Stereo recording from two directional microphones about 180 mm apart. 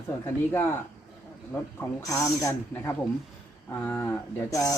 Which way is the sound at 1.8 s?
15° left (ahead or behind).